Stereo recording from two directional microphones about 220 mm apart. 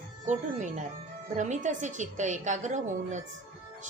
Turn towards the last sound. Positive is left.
turn(degrees=-35)  # may be behind; listen again after turning